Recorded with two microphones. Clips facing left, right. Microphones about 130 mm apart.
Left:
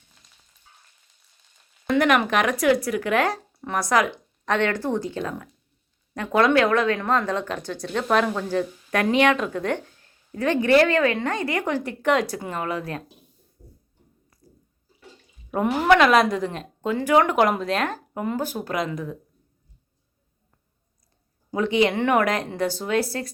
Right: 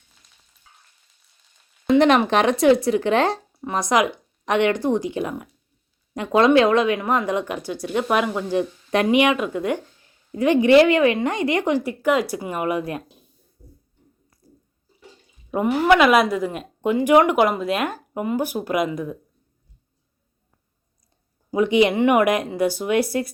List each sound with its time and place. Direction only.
1.9 s speech: 25° right (ahead or behind)
11.8 s speech: 5° right (ahead or behind)
15.5 s speech: 5° right (ahead or behind)
17.3 s speech: 5° right (ahead or behind)
21.5 s speech: 15° right (ahead or behind)